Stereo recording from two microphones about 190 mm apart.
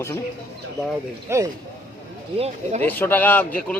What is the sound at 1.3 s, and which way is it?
Speech, 15° right (ahead or behind).